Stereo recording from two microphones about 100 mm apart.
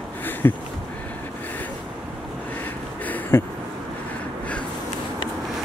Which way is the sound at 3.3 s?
20° left (ahead or behind).